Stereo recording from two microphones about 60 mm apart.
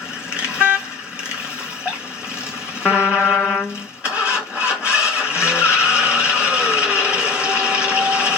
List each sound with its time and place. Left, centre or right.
0.3 s vehicle: centre
2.8 s music: right
3.3 s music: centre
4.0 s vehicle: centre
7.6 s a sound: centre